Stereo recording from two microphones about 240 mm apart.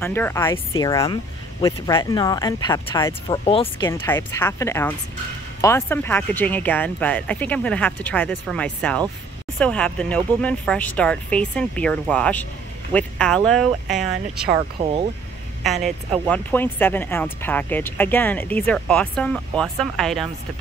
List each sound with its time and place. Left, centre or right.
0.0 s speech: centre
4.0 s speech: centre
14.8 s speech: right
15.6 s speech: centre